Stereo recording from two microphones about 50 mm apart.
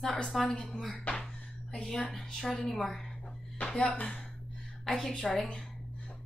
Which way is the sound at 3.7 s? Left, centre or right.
Left.